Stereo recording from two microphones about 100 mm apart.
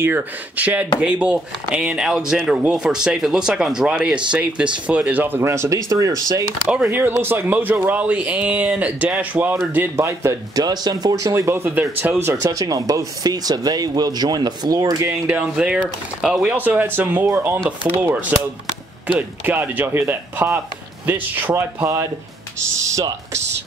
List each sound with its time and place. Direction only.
0.0 s speech: 15° right (ahead or behind); by 6.4 s 35° right (ahead or behind)
6.9 s speech: 20° right (ahead or behind)
10.0 s speech: 35° right (ahead or behind)
12.3 s speech: 35° right (ahead or behind)
15.2 s speech: 15° right (ahead or behind)
22.6 s speech: 30° right (ahead or behind)